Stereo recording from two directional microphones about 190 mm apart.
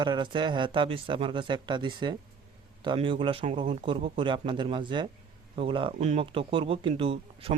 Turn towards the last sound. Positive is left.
turn(degrees=-30)  # may be behind; listen again after turning